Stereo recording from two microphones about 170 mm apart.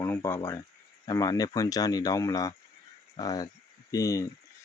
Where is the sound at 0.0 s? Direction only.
20° left (ahead or behind).